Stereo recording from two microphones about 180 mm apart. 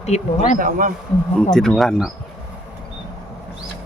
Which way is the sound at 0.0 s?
40° left (ahead or behind).